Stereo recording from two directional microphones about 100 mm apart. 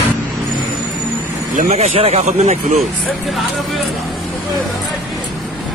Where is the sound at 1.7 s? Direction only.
90° right.